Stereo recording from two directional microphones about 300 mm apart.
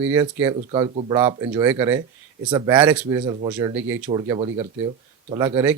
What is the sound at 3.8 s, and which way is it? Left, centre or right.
Speech, right.